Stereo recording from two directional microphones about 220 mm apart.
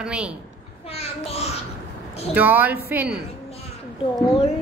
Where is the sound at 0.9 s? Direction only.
25° left (ahead or behind).